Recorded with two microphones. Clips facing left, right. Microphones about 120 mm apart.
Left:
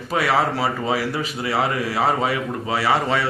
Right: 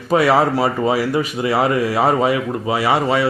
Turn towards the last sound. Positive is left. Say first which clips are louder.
# right 3 dB
turn(degrees=-15)  # may be behind; listen again after turning